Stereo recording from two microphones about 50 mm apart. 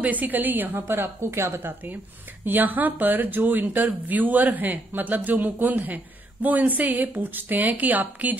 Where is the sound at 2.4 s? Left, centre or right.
Right.